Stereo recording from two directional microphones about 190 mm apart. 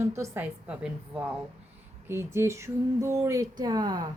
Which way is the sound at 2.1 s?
15° right (ahead or behind).